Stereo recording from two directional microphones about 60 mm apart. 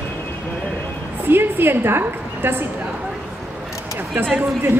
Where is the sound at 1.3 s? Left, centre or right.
Right.